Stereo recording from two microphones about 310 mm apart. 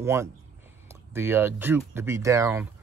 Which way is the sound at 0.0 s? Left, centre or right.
Centre.